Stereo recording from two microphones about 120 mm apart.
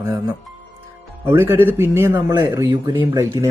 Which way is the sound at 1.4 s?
15° right (ahead or behind).